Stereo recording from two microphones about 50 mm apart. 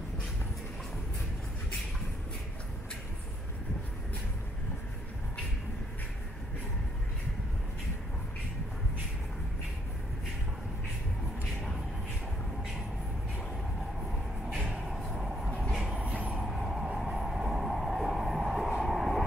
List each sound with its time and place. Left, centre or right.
14.9 s vehicle: centre
16.0 s vehicle: right
16.3 s train: centre
18.1 s a sound: centre
18.8 s vehicle: centre